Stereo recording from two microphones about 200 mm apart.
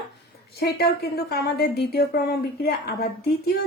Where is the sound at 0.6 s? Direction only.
50° left (ahead or behind).